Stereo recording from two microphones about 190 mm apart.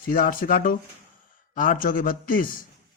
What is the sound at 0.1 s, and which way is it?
Speech, 45° left (ahead or behind).